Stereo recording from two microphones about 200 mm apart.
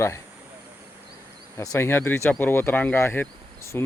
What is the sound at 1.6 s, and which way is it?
Speech, 10° left (ahead or behind).